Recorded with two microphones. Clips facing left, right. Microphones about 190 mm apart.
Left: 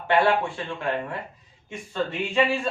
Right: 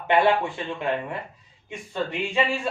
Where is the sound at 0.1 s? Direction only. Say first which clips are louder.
Right 1 dB; 20° right (ahead or behind).